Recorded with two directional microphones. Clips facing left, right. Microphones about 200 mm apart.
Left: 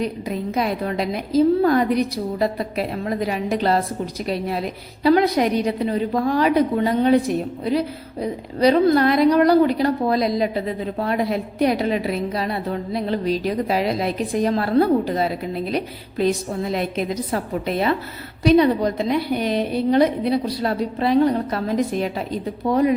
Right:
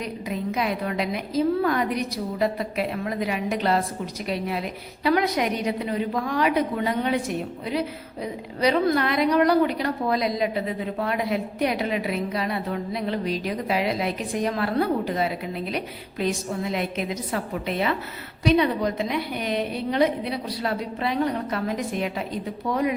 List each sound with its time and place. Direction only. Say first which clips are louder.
0.0 s a woman's voice: left 4 dB; 35° left (ahead or behind)